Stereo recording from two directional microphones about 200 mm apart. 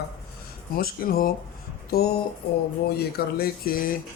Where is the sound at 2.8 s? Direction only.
50° left (ahead or behind).